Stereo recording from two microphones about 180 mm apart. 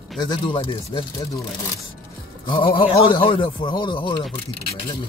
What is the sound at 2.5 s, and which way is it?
A man's voice, 30° left (ahead or behind).